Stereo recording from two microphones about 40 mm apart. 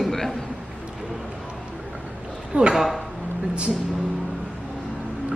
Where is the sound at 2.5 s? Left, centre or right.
Right.